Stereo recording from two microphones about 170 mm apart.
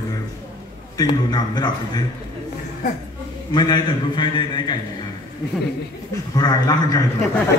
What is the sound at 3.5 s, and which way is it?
A man's voice, 25° left (ahead or behind).